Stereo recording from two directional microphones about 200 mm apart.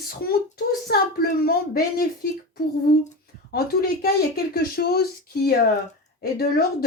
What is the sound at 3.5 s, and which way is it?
Speech, 50° left (ahead or behind).